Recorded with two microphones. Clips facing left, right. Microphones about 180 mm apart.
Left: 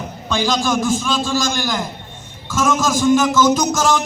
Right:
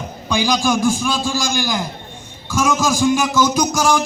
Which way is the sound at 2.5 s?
20° left (ahead or behind).